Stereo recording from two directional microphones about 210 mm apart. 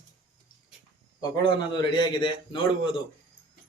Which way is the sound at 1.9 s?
20° left (ahead or behind).